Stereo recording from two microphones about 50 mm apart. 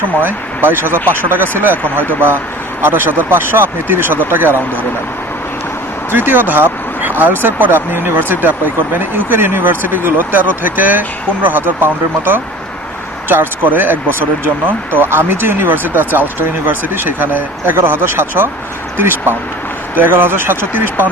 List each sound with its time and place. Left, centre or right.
0.2 s speech: right
2.8 s speech: right
6.1 s speech: right